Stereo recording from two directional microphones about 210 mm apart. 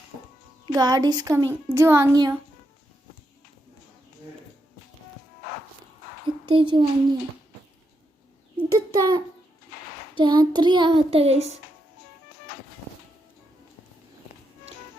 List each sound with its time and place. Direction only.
0.6 s speech: 20° right (ahead or behind)
6.2 s speech: 25° right (ahead or behind)
8.7 s a sound: 20° right (ahead or behind)
10.2 s child singing: 20° right (ahead or behind)